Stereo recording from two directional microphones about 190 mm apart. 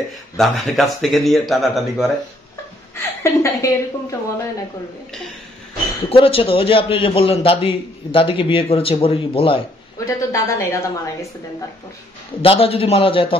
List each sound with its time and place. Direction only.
0.4 s speech: centre (ahead or behind)
3.0 s a woman's voice: 15° left (ahead or behind)
6.0 s a man's voice: 30° left (ahead or behind)
9.9 s a woman's voice: 15° left (ahead or behind)
12.4 s a man's voice: 30° left (ahead or behind)